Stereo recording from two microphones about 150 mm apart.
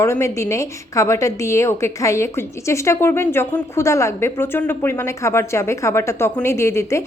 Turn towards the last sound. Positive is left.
turn(degrees=20)  # may be behind; listen again after turning